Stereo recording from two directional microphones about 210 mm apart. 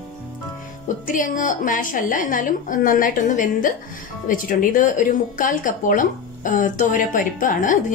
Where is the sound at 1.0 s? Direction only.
40° left (ahead or behind).